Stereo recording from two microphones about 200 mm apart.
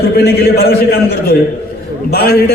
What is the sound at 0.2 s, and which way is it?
A man's voice, 50° left (ahead or behind).